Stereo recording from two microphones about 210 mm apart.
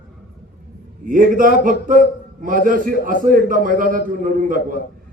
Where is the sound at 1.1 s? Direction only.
40° right (ahead or behind).